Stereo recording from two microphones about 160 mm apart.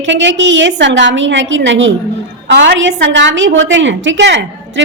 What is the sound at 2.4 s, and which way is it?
A woman's voice, 90° right.